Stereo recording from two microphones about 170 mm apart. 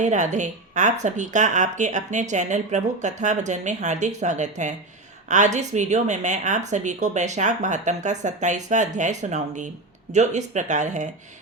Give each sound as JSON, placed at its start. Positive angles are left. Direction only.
{"t": 0.0, "sound": "a woman's voice", "side_deg": -45}